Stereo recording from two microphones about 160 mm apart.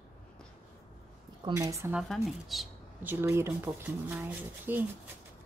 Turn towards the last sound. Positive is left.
turn(degrees=-10)  # may be behind; listen again after turning